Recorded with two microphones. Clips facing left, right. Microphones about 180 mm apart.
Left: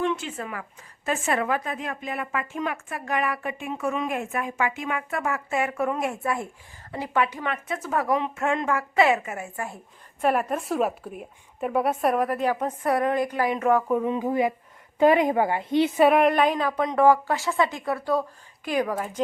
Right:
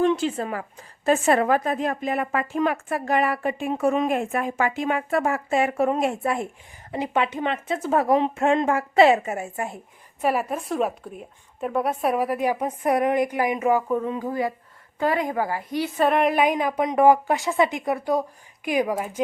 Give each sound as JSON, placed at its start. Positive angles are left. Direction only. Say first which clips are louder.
{"t": 0.0, "sound": "a woman's voice", "louder": "right 6 dB", "side_deg": -35}
{"t": 10.2, "sound": "a woman's voice", "louder": "even", "side_deg": -5}
{"t": 14.1, "sound": "a woman's voice", "louder": "left 2 dB", "side_deg": 20}
{"t": 16.0, "sound": "a woman's voice", "louder": "left 1 dB", "side_deg": 5}
{"t": 16.3, "sound": "speech", "louder": "right 1 dB", "side_deg": -15}